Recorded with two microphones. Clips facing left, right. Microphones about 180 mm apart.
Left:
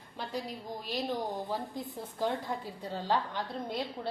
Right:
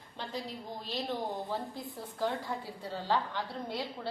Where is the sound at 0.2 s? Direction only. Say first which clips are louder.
Left 2 dB; 10° left (ahead or behind).